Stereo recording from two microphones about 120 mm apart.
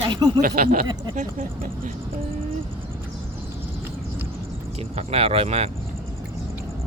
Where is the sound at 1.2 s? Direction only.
90° right.